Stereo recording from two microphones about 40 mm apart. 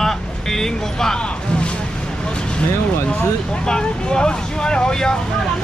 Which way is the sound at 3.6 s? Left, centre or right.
Centre.